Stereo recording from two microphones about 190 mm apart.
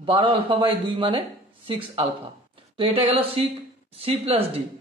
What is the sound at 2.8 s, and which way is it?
Speech, 30° right (ahead or behind).